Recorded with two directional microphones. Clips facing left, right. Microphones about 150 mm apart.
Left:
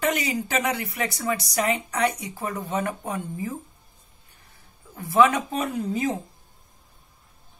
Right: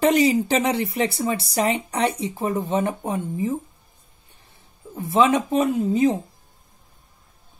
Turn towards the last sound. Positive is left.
turn(degrees=-25)  # may be behind; listen again after turning